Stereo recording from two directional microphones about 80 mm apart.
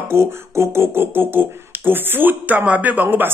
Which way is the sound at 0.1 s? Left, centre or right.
Right.